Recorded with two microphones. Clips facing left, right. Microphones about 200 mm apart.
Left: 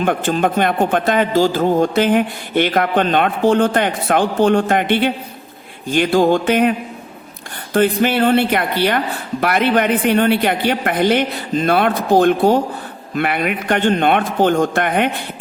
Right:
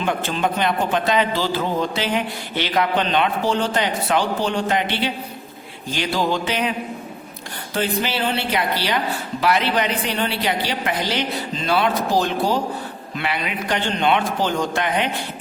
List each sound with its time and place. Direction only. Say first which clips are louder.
0.0 s a man's voice: left 5 dB; 50° left (ahead or behind)